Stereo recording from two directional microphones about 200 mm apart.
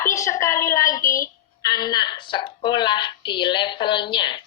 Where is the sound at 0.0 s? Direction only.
15° left (ahead or behind).